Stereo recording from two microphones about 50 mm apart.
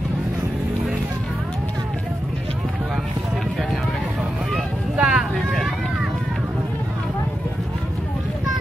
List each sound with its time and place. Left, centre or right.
4.9 s vehicle: centre